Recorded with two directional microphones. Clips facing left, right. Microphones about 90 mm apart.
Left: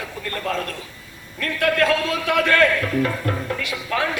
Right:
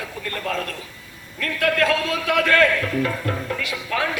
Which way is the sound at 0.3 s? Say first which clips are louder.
Left 1 dB; 35° left (ahead or behind).